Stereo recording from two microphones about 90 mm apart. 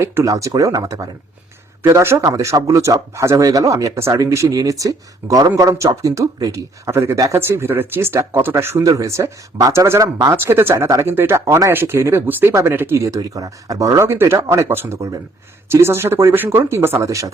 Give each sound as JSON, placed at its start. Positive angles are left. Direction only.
{"t": 0.0, "sound": "speech", "side_deg": -30}
{"t": 0.3, "sound": "speech", "side_deg": -40}
{"t": 10.3, "sound": "speech", "side_deg": -25}
{"t": 10.8, "sound": "speech", "side_deg": -40}
{"t": 11.1, "sound": "speech", "side_deg": -25}